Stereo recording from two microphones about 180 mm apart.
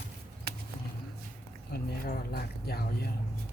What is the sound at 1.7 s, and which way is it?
Speech, 60° left (ahead or behind).